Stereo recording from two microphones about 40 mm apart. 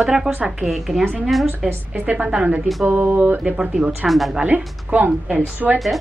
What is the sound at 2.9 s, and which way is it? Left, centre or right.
Speech, right.